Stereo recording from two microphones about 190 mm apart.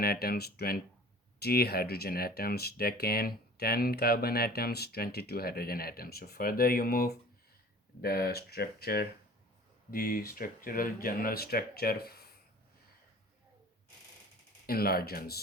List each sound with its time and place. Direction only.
0.0 s speech: 50° left (ahead or behind)
14.7 s speech: 50° left (ahead or behind)